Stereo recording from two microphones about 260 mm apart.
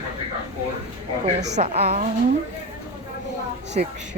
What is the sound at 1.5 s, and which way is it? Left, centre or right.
Speech, right.